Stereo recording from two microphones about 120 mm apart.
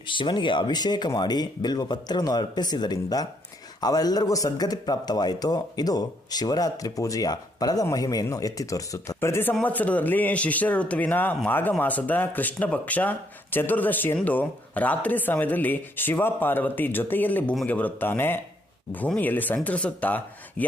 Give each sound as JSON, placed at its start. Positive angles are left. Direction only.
{"t": 0.1, "sound": "speech", "side_deg": 40}